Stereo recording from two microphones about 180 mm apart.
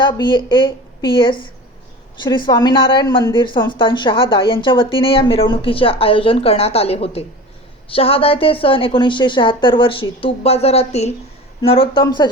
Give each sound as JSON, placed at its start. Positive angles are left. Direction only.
{"t": 0.0, "sound": "a woman's voice", "side_deg": 25}